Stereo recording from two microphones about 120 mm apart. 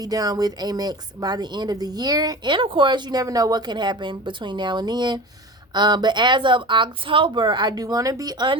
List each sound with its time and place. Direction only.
0.0 s a woman's voice: 30° right (ahead or behind)